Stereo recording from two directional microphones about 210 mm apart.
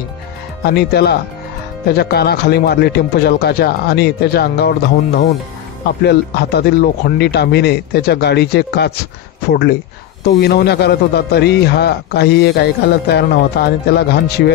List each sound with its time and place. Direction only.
0.7 s a man's voice: 50° left (ahead or behind)